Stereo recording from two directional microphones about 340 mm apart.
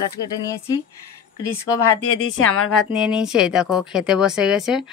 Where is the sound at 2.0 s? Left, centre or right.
Left.